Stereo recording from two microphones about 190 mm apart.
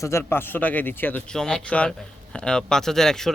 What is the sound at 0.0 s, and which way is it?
Speech, 15° left (ahead or behind).